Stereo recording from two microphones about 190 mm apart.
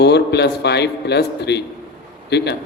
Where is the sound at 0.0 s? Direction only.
60° left (ahead or behind).